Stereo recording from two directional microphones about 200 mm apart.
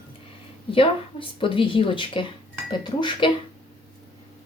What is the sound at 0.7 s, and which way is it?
Speech, 25° left (ahead or behind).